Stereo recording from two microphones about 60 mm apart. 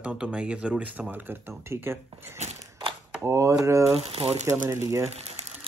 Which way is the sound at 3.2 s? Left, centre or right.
Right.